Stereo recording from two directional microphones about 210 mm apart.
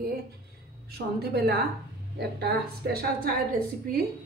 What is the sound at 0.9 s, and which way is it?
A woman's voice, 50° right (ahead or behind).